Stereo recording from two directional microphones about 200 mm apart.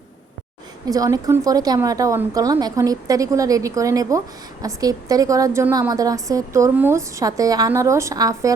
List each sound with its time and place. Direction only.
0.9 s a woman's voice: 15° right (ahead or behind)